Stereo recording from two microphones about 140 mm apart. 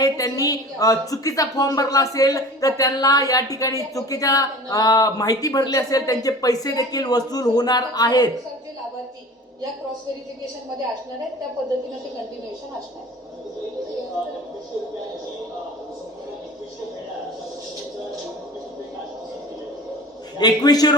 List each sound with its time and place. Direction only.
0.0 s a woman's voice: 25° left (ahead or behind)
20.4 s a woman's voice: 30° left (ahead or behind)